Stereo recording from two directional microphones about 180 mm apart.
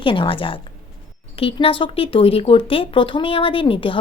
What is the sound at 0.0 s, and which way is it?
Speech, 30° left (ahead or behind).